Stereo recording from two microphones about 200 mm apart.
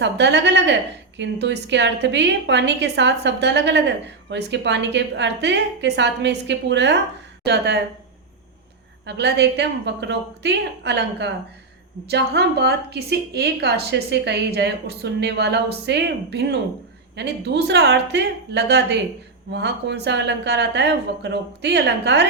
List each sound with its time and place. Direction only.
0.0 s a woman's voice: 60° right (ahead or behind)
9.0 s a woman's voice: 60° right (ahead or behind)